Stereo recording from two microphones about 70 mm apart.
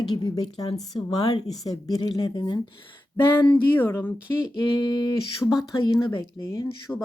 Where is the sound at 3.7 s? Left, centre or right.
Left.